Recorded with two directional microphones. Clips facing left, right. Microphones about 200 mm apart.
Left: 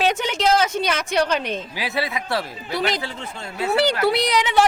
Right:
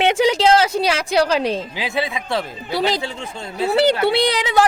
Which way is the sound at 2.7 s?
35° right (ahead or behind).